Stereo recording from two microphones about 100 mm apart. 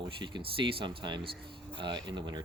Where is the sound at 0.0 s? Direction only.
50° right (ahead or behind).